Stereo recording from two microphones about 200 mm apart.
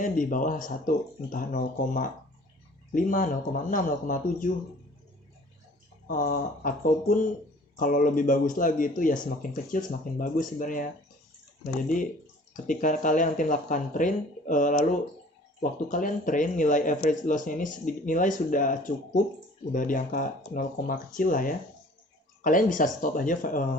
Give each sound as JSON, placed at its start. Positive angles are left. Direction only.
{"t": 0.0, "sound": "speech", "side_deg": 40}
{"t": 6.1, "sound": "speech", "side_deg": 40}